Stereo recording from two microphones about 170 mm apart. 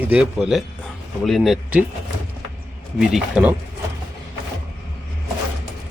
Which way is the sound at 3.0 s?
5° right (ahead or behind).